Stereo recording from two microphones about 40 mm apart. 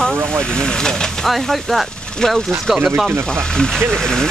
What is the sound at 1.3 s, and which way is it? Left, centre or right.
Speech, centre.